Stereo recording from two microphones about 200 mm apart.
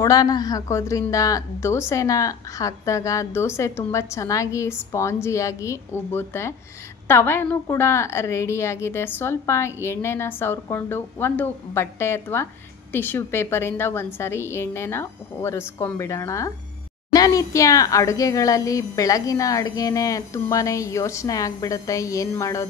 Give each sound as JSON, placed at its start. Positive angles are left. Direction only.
{"t": 0.0, "sound": "a woman's voice", "side_deg": 15}